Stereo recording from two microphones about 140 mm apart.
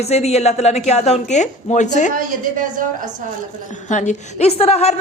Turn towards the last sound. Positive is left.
turn(degrees=50)  # may be behind; listen again after turning